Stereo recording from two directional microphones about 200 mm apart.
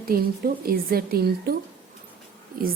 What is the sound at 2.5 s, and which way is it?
Speech, 45° right (ahead or behind).